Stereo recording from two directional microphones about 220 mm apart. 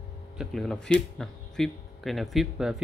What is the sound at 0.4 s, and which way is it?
Speech, centre (ahead or behind).